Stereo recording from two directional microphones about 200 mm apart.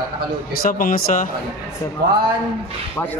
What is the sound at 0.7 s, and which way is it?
Speech, 45° left (ahead or behind).